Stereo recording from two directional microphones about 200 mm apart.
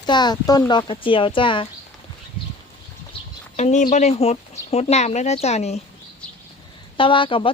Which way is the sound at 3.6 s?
35° left (ahead or behind).